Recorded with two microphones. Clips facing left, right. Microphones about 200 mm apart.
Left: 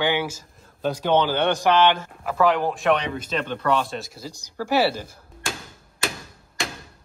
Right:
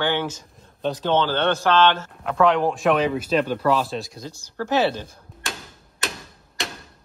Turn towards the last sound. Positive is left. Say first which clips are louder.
# left 1 dB
turn(degrees=0)  # may be behind; listen again after turning